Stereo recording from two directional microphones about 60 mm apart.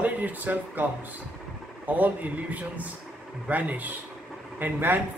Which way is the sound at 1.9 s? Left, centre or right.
Right.